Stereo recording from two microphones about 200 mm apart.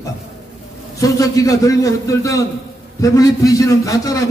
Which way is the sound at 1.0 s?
15° left (ahead or behind).